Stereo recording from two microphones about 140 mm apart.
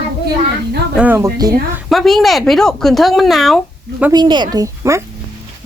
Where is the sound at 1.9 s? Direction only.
Centre (ahead or behind).